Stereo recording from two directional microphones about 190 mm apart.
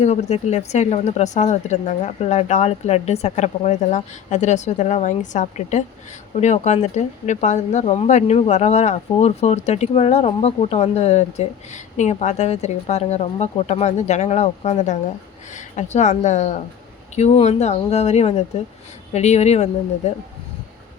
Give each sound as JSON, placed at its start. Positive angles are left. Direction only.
{"t": 0.0, "sound": "speech", "side_deg": 35}